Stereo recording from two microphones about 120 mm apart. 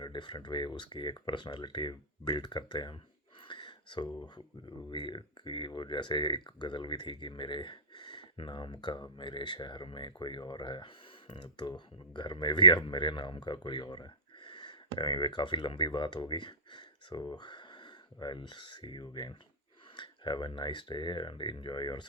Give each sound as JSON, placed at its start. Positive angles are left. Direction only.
{"t": 0.0, "sound": "speech", "side_deg": 40}
{"t": 3.4, "sound": "a sound", "side_deg": 40}
{"t": 4.9, "sound": "speech", "side_deg": 40}